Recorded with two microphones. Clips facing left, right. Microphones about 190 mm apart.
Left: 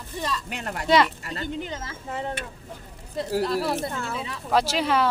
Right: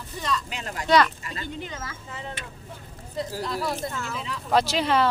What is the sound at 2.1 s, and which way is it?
Speech, 55° left (ahead or behind).